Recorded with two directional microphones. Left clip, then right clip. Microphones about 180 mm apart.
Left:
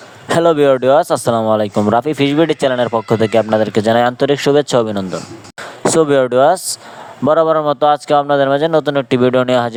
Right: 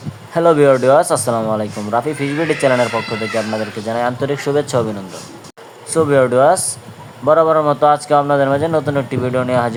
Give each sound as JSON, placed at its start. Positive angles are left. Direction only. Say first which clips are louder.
{"t": 0.3, "sound": "speech", "louder": "even", "side_deg": 55}
{"t": 5.8, "sound": "speech", "louder": "left 2 dB", "side_deg": 55}